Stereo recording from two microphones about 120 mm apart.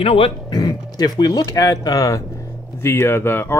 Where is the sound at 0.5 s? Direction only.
35° left (ahead or behind).